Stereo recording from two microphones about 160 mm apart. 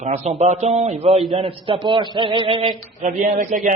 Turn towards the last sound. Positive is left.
turn(degrees=-55)  # may be behind; listen again after turning